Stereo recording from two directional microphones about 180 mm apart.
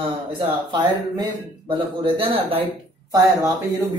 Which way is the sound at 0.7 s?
25° right (ahead or behind).